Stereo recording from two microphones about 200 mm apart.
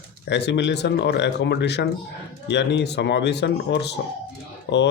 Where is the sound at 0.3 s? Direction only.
60° left (ahead or behind).